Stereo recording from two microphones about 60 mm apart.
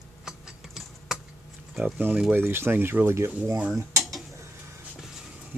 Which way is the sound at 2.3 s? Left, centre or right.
Right.